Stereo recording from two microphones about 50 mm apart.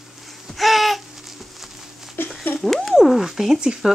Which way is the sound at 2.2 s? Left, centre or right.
Left.